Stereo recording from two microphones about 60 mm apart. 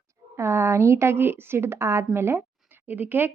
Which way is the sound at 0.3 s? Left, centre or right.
Right.